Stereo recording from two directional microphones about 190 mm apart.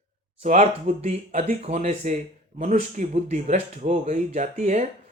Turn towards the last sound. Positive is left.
turn(degrees=-40)  # may be behind; listen again after turning